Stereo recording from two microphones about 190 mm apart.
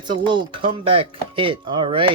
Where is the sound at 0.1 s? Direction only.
25° right (ahead or behind).